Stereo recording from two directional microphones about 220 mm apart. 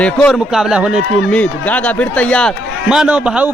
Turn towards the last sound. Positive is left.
turn(degrees=-5)  # may be behind; listen again after turning